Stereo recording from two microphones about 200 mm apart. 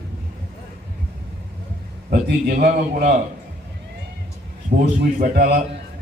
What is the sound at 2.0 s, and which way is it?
A man's voice, 45° right (ahead or behind).